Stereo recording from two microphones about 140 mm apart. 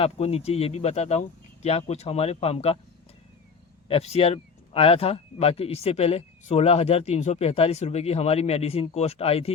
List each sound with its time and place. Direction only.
0.0 s speech: 45° left (ahead or behind)
3.8 s speech: 45° left (ahead or behind)